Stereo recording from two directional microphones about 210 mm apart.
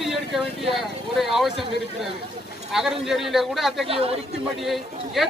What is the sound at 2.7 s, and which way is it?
Speech, centre (ahead or behind).